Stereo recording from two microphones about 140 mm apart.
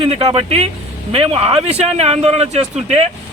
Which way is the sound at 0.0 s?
45° right (ahead or behind).